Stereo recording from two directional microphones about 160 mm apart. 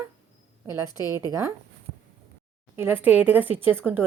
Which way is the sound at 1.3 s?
20° right (ahead or behind).